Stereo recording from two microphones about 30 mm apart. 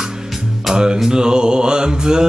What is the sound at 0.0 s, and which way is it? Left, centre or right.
Music, centre.